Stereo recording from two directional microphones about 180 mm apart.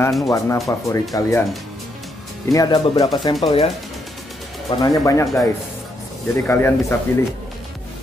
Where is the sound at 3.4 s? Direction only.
35° left (ahead or behind).